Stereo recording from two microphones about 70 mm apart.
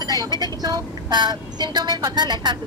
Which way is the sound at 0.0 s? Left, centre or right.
Right.